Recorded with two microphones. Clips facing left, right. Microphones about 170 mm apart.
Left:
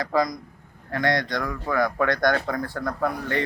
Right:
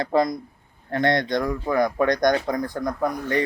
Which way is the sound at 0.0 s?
25° right (ahead or behind).